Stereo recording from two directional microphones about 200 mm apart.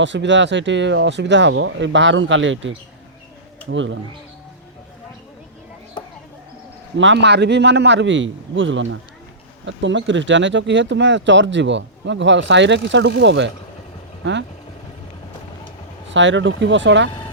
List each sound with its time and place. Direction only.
0.0 s speech: 65° right (ahead or behind)
6.9 s speech: 65° right (ahead or behind)
16.0 s speech: 65° right (ahead or behind)